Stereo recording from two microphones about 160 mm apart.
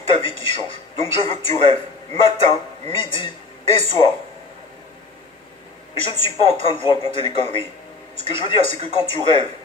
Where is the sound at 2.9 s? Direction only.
30° left (ahead or behind).